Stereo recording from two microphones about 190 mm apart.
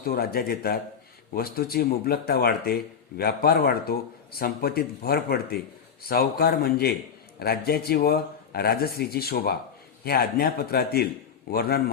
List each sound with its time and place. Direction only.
0.0 s a man's voice: 50° left (ahead or behind)